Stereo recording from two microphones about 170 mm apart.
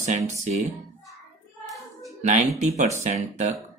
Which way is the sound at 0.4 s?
40° right (ahead or behind).